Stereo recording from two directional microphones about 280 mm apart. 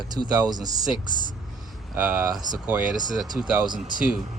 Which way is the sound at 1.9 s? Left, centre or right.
Centre.